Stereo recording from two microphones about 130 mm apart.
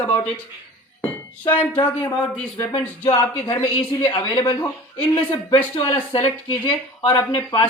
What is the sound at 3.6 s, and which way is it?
Speech, 40° left (ahead or behind).